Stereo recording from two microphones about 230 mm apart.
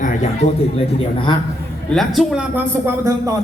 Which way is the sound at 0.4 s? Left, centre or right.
Left.